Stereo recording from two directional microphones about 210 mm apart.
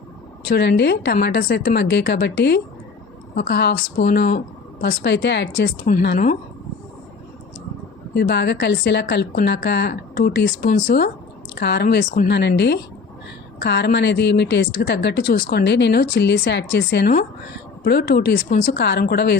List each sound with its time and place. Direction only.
0.4 s speech: 50° left (ahead or behind)
8.1 s speech: 50° left (ahead or behind)